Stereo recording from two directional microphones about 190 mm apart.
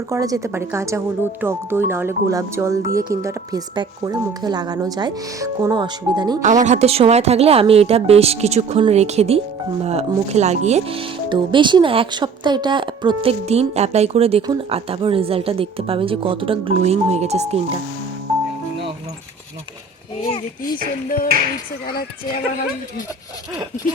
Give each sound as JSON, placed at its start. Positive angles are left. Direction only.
{"t": 0.1, "sound": "speech", "side_deg": -15}
{"t": 6.4, "sound": "speech", "side_deg": -40}